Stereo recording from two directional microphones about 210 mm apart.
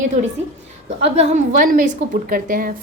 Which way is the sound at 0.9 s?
30° right (ahead or behind).